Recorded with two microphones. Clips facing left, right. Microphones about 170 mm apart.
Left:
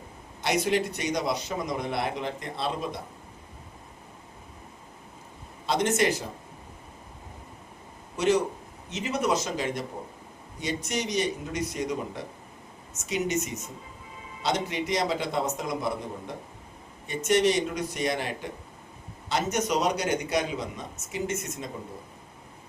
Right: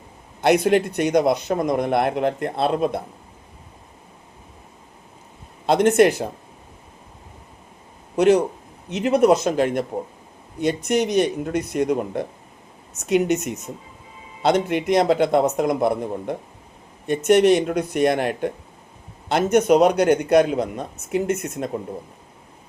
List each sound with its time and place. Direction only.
0.4 s a man's voice: 55° right (ahead or behind)
5.6 s a man's voice: 55° right (ahead or behind)
8.1 s a man's voice: 60° right (ahead or behind)